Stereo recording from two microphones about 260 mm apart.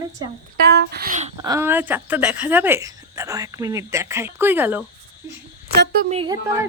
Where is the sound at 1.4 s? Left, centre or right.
Centre.